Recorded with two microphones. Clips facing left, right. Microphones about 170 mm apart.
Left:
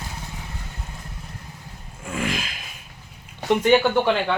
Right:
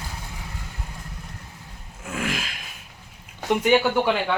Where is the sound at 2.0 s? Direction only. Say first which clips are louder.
Left 2 dB; 5° right (ahead or behind).